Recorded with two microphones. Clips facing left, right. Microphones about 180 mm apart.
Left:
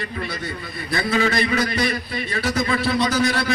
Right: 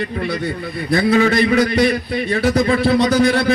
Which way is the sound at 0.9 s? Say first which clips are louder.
Right 7 dB; 45° right (ahead or behind).